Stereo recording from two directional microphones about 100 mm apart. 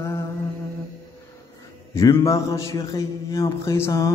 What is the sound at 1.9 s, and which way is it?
A man's voice, 35° left (ahead or behind).